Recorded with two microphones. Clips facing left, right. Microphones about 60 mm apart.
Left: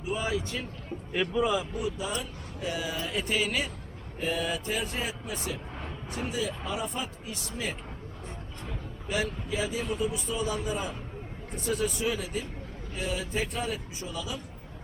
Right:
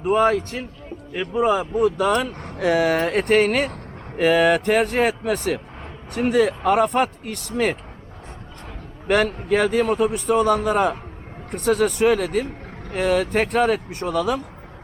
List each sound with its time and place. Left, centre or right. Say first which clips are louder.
0.0 s speech: right 13 dB; right
4.2 s speech: right 14 dB; right
6.5 s speech: right 15 dB; right
9.0 s speech: right 12 dB; right